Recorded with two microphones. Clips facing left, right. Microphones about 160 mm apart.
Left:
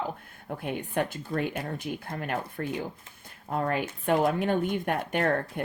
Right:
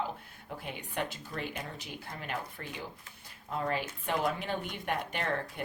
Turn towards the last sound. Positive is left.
turn(degrees=50)  # may be behind; listen again after turning